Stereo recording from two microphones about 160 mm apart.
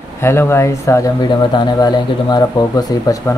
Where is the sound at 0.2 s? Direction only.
15° left (ahead or behind).